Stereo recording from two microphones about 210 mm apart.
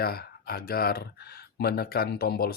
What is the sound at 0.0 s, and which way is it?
Speech, 45° left (ahead or behind).